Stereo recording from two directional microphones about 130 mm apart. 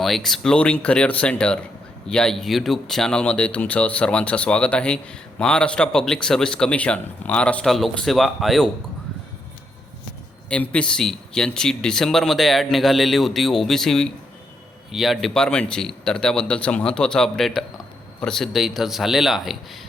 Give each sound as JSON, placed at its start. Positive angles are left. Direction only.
{"t": 0.0, "sound": "speech", "side_deg": 0}
{"t": 10.5, "sound": "speech", "side_deg": 10}